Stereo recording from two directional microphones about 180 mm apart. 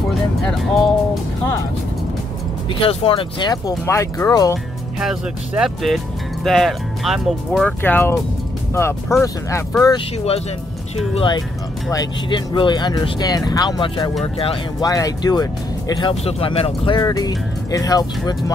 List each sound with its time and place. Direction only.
0.4 s speech: centre (ahead or behind)
2.8 s speech: 30° left (ahead or behind)
5.0 s speech: centre (ahead or behind)
7.8 s speech: 10° left (ahead or behind)
9.9 s speech: 35° left (ahead or behind)
14.9 s speech: 20° left (ahead or behind)